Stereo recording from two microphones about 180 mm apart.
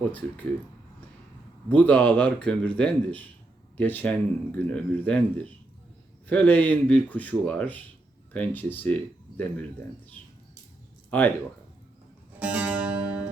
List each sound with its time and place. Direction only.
0.0 s speech: 10° left (ahead or behind)
1.7 s speech: 10° left (ahead or behind)
11.1 s speech: 10° left (ahead or behind)
12.4 s music: 5° right (ahead or behind)